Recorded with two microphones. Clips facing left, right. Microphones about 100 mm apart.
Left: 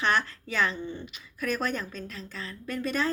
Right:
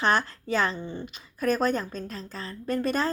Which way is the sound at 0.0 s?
35° right (ahead or behind).